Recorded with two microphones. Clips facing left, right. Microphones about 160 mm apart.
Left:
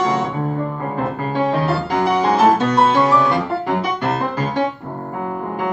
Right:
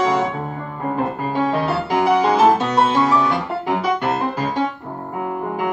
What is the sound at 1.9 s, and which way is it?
Music, 5° right (ahead or behind).